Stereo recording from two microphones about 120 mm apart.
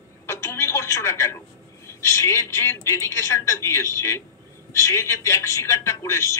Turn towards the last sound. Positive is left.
turn(degrees=25)  # may be behind; listen again after turning